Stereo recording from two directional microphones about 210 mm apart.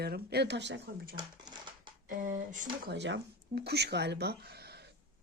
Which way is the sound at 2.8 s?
55° right (ahead or behind).